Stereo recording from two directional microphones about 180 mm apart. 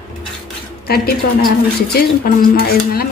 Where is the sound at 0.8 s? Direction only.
60° left (ahead or behind).